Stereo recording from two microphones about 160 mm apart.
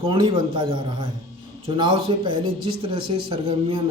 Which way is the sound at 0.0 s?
35° right (ahead or behind).